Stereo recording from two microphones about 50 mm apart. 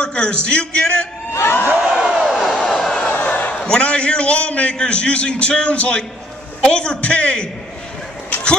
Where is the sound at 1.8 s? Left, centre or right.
Centre.